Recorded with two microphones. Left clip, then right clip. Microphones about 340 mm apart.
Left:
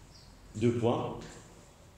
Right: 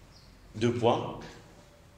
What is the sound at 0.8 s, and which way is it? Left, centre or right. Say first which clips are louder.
Speech: right 6 dB; right.